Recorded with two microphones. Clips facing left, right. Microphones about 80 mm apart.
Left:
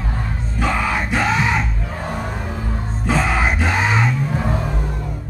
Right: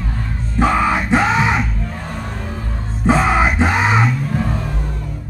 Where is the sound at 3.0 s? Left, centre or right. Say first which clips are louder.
Right 5 dB; right.